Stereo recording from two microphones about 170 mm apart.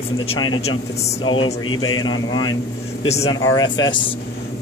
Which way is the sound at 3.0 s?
40° left (ahead or behind).